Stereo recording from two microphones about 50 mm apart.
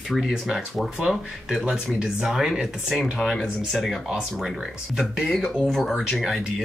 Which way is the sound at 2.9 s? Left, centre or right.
Centre.